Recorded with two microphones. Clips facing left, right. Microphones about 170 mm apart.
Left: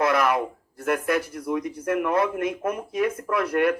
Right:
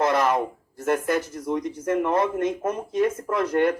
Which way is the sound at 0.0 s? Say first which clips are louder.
Even; 25° right (ahead or behind).